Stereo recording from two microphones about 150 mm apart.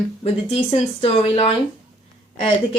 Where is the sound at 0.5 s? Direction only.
35° left (ahead or behind).